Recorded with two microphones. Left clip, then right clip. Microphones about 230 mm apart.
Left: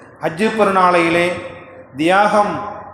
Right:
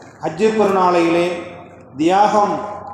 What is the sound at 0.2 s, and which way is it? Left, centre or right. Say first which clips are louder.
A man's voice: even; left.